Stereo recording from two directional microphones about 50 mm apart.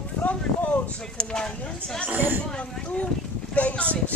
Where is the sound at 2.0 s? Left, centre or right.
Right.